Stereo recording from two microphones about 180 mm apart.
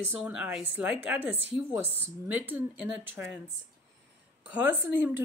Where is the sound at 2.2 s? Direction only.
10° right (ahead or behind).